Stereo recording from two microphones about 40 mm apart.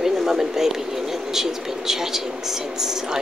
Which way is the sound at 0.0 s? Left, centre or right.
Centre.